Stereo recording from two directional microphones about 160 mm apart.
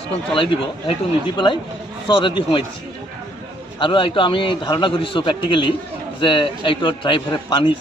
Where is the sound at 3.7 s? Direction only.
30° left (ahead or behind).